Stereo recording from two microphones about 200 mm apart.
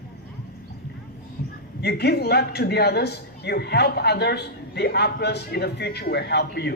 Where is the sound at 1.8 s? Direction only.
55° left (ahead or behind).